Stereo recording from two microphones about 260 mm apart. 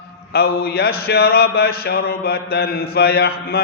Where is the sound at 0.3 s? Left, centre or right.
Left.